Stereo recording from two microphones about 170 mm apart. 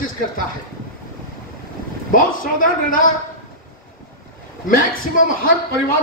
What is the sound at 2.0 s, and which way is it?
Speech, 55° left (ahead or behind).